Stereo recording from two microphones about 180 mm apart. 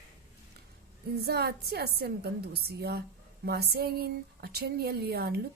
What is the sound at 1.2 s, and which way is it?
Speech, 65° right (ahead or behind).